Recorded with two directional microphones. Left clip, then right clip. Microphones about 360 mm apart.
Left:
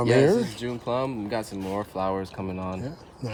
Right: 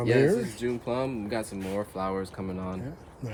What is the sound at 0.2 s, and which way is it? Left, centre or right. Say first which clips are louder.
Speech: left 3 dB; centre.